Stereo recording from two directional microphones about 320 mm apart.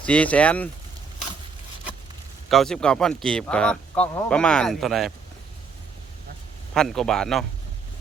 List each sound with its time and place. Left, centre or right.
0.0 s speech: centre
2.5 s speech: centre
6.7 s speech: centre